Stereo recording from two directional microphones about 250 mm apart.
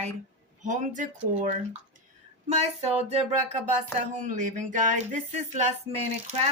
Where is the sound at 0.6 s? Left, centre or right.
Right.